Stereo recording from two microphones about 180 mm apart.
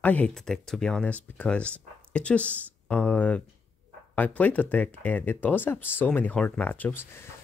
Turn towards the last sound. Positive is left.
turn(degrees=15)  # may be behind; listen again after turning